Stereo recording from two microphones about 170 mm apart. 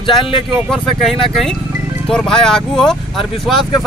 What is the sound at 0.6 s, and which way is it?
Speech, centre (ahead or behind).